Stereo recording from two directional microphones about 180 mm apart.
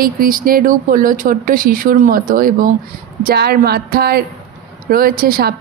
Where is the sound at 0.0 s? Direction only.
50° right (ahead or behind).